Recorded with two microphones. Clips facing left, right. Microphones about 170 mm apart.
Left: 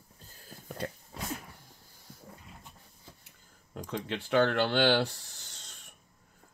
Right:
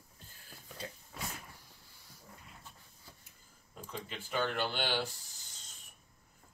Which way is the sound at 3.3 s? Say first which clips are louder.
Left 3 dB; 75° left (ahead or behind).